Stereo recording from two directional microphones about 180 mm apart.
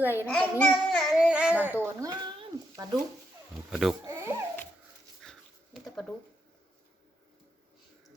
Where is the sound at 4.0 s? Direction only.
15° right (ahead or behind).